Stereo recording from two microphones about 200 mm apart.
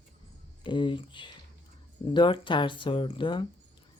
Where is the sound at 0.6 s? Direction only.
25° left (ahead or behind).